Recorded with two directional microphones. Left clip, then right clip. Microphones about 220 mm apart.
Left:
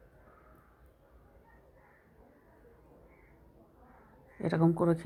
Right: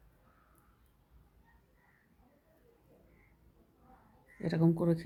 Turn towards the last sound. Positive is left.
turn(degrees=5)  # may be behind; listen again after turning